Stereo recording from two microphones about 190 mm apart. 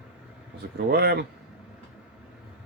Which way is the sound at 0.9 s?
55° right (ahead or behind).